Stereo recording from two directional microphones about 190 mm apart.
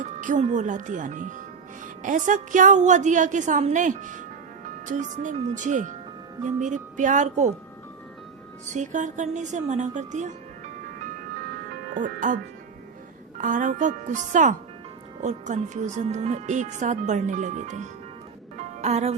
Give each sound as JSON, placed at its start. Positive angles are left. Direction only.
{"t": 0.0, "sound": "speech", "side_deg": -40}
{"t": 8.7, "sound": "speech", "side_deg": -40}
{"t": 11.9, "sound": "speech", "side_deg": -45}
{"t": 13.4, "sound": "speech", "side_deg": -45}